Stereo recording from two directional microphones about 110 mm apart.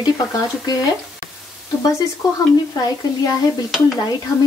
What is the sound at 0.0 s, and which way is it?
Stir, 35° left (ahead or behind).